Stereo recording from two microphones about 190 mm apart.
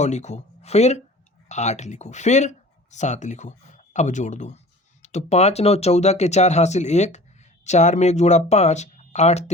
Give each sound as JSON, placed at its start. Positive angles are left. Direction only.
{"t": 0.0, "sound": "speech", "side_deg": 35}